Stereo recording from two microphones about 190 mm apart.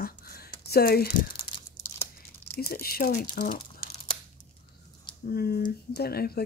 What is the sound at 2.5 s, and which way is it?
Speech, 55° left (ahead or behind).